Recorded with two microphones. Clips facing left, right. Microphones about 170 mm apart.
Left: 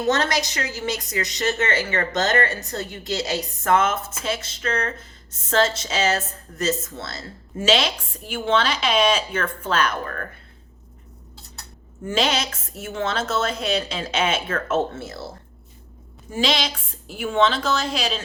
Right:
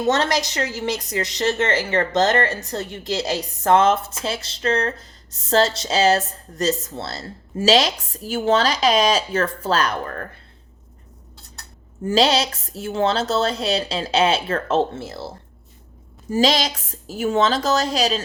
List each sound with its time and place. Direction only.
0.0 s a woman's voice: 25° right (ahead or behind)
12.0 s a woman's voice: 35° right (ahead or behind)
16.3 s a woman's voice: 40° right (ahead or behind)